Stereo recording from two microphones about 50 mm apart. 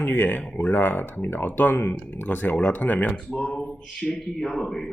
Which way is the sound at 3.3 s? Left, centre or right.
Centre.